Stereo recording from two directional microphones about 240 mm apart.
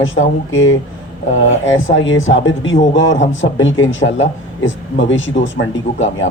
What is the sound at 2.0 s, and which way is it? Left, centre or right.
Speech, left.